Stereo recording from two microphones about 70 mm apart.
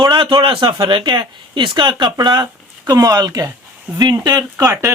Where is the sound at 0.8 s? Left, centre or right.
Right.